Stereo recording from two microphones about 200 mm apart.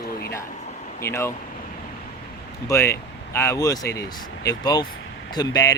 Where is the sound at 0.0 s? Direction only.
50° left (ahead or behind).